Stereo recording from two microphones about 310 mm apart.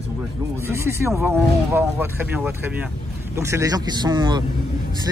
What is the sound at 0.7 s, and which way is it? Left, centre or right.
Speech, centre.